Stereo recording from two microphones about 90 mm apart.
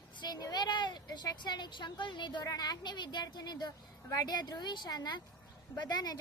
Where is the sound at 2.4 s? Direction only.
45° left (ahead or behind).